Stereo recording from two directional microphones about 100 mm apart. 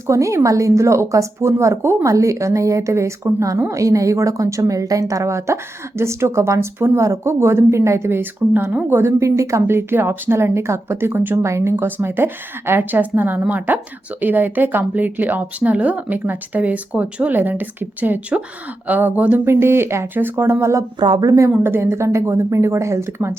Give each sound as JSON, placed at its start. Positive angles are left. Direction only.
{"t": 0.1, "sound": "speech", "side_deg": -30}
{"t": 21.0, "sound": "speech", "side_deg": -45}
{"t": 21.5, "sound": "speech", "side_deg": -20}